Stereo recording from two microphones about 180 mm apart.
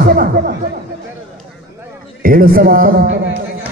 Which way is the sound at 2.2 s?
55° right (ahead or behind).